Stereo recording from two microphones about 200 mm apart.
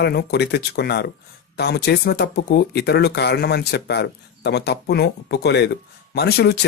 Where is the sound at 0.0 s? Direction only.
55° left (ahead or behind).